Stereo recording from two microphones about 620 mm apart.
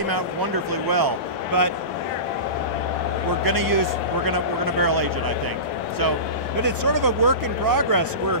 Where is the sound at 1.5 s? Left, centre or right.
Right.